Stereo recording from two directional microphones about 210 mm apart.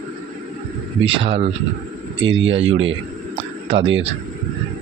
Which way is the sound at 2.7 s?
65° right (ahead or behind).